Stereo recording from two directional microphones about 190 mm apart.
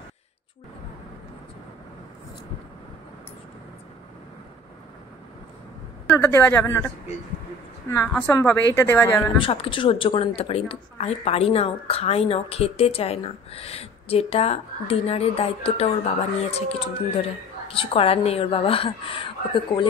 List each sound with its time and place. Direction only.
6.1 s speech: 10° left (ahead or behind)
8.3 s speech: 15° left (ahead or behind)
9.4 s a woman's voice: 30° left (ahead or behind)